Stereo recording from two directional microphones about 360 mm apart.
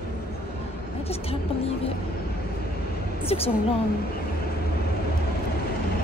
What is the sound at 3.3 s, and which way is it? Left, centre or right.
Speech, centre.